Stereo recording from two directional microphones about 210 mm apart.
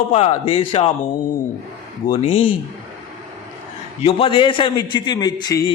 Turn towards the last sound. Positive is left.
turn(degrees=20)  # may be behind; listen again after turning